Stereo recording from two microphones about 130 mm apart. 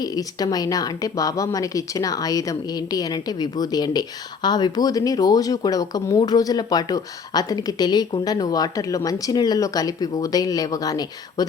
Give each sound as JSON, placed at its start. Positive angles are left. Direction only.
{"t": 0.0, "sound": "speech", "side_deg": 30}